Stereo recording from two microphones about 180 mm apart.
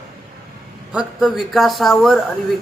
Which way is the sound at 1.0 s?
Centre (ahead or behind).